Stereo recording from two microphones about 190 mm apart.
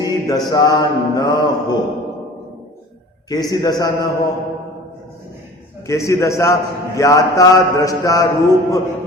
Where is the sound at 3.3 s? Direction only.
20° left (ahead or behind).